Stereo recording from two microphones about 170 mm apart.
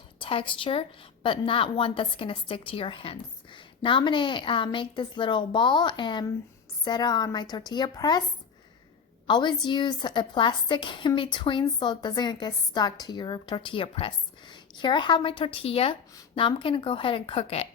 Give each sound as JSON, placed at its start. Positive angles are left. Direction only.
{"t": 0.2, "sound": "a woman's voice", "side_deg": 30}
{"t": 9.2, "sound": "a woman's voice", "side_deg": 25}